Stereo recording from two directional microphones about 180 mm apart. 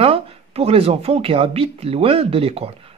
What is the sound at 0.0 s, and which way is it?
Speech, 35° right (ahead or behind).